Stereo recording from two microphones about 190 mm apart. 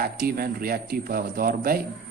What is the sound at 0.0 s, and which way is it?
A man's voice, 50° right (ahead or behind).